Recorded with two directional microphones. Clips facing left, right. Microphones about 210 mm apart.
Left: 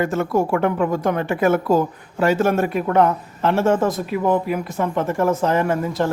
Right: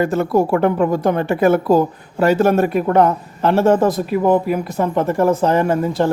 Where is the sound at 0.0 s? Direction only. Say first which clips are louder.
Right 4 dB; 35° right (ahead or behind).